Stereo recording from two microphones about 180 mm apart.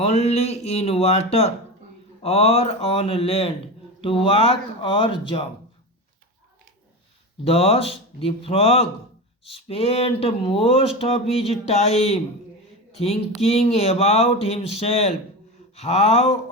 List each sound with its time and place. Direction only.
0.0 s speech: 35° left (ahead or behind)
7.4 s speech: 35° left (ahead or behind)